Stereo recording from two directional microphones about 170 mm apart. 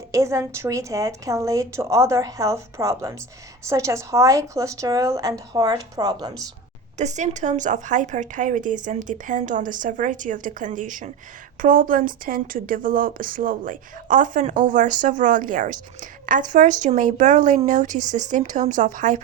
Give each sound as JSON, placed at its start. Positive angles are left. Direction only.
{"t": 0.1, "sound": "a woman's voice", "side_deg": -15}
{"t": 6.9, "sound": "a woman's voice", "side_deg": -45}